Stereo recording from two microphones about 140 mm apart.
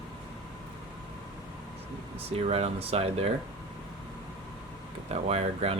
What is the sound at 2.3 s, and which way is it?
Speech, 45° right (ahead or behind).